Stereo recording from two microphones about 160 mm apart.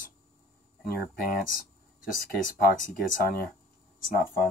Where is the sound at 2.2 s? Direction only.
65° left (ahead or behind).